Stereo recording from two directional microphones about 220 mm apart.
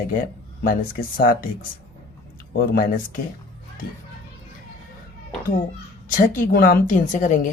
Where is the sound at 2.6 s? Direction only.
40° left (ahead or behind).